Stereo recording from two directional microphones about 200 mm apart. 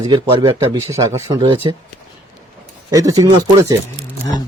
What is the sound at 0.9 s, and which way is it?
Speech, 15° right (ahead or behind).